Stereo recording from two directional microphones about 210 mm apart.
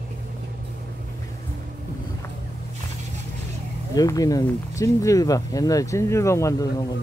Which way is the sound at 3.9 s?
15° left (ahead or behind).